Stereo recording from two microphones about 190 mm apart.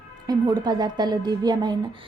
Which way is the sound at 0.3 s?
20° right (ahead or behind).